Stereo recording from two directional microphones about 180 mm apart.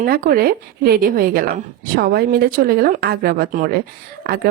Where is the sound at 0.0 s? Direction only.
55° right (ahead or behind).